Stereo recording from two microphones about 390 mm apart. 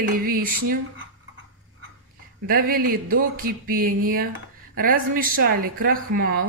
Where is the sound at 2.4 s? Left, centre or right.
Right.